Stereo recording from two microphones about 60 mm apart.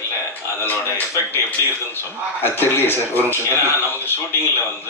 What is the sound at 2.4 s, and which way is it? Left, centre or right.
Speech, left.